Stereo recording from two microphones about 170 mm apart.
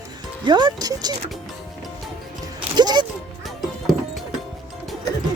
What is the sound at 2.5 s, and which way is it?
Music, 25° right (ahead or behind).